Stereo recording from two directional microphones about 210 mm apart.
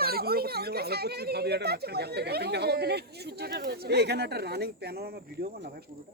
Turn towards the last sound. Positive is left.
turn(degrees=-50)  # may be behind; listen again after turning